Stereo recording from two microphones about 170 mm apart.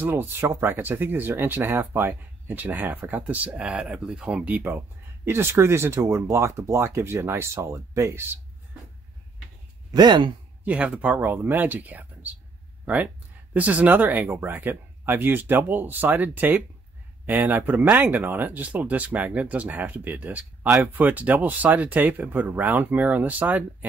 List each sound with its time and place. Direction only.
0.0 s speech: 15° right (ahead or behind)
9.8 s speech: 25° right (ahead or behind)
10.6 s speech: 5° right (ahead or behind)